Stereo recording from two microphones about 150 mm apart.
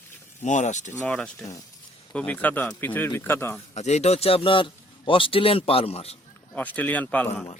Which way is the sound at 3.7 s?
45° left (ahead or behind).